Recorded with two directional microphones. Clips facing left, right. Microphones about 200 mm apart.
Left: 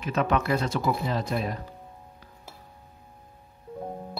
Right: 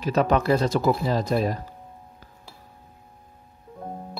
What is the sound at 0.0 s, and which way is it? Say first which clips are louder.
Speech: right 4 dB; 35° right (ahead or behind).